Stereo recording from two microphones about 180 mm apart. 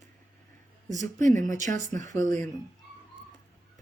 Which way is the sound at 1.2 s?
45° right (ahead or behind).